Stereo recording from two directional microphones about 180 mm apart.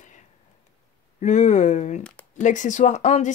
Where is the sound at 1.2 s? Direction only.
40° left (ahead or behind).